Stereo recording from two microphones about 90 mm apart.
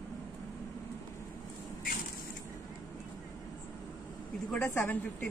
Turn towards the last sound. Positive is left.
turn(degrees=25)  # may be behind; listen again after turning